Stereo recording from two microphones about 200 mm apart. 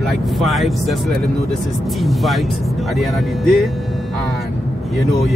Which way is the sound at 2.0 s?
Centre (ahead or behind).